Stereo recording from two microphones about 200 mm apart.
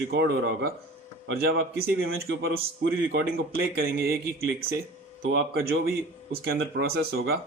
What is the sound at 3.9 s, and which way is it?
Speech, 50° right (ahead or behind).